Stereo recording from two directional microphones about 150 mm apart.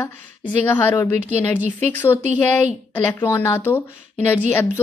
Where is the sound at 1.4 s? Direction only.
15° left (ahead or behind).